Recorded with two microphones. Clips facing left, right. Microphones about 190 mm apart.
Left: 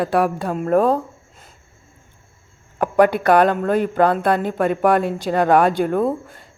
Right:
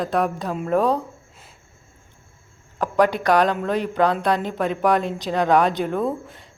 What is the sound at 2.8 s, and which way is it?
Speech, 55° left (ahead or behind).